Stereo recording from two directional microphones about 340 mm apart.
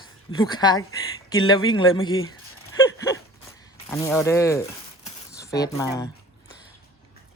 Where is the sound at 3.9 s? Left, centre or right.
Centre.